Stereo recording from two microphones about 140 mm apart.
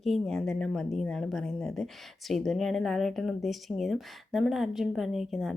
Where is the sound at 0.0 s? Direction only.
Centre (ahead or behind).